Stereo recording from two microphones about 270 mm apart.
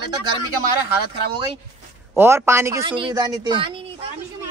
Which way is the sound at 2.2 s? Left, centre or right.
Centre.